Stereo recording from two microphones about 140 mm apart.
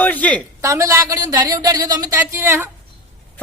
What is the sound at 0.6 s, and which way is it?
Speech, 20° right (ahead or behind).